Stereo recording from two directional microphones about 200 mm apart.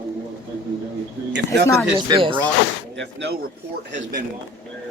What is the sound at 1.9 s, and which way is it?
Speech, 25° right (ahead or behind).